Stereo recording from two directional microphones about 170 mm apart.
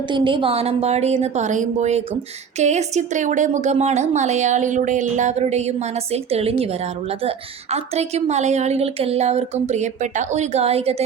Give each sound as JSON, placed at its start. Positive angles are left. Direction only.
{"t": 0.1, "sound": "a woman's voice", "side_deg": -30}